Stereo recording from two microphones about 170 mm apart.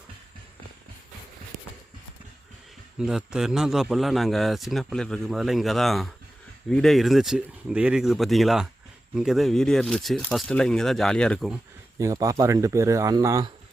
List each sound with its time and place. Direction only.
3.0 s speech: 5° right (ahead or behind)
11.9 s speech: 20° right (ahead or behind)